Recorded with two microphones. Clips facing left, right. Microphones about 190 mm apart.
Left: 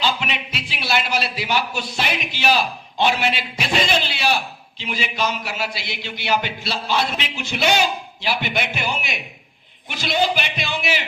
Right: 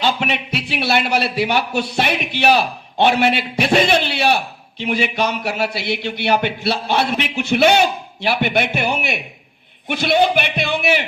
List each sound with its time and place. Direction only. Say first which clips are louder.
0.0 s a man's voice: right 4 dB; 55° right (ahead or behind)